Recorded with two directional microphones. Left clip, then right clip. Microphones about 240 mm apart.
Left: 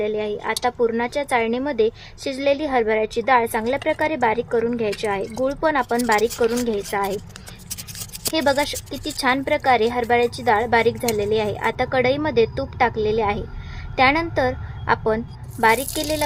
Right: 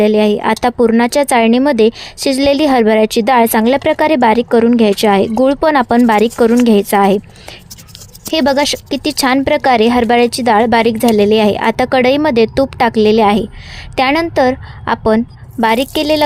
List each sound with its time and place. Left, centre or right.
0.0 s speech: right
8.3 s speech: right